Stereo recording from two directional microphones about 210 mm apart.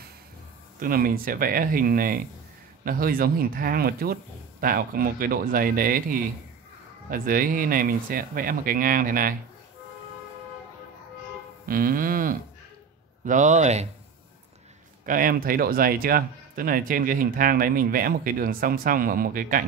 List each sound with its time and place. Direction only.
0.7 s speech: 45° right (ahead or behind)
11.6 s music: 45° right (ahead or behind)
13.2 s speech: 35° right (ahead or behind)
15.0 s speech: 40° right (ahead or behind)